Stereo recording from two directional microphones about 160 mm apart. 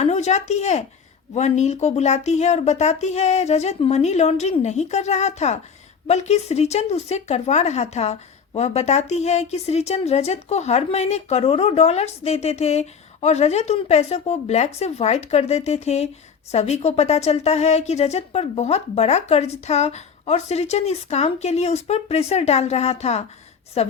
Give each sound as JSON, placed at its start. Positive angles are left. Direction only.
{"t": 0.0, "sound": "a woman's voice", "side_deg": 45}